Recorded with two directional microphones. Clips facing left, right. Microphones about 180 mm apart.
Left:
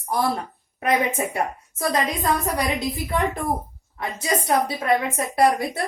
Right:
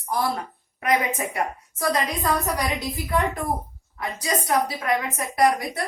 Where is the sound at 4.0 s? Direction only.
25° left (ahead or behind).